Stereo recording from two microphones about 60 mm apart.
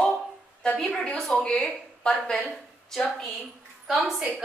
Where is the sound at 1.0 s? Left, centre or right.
Centre.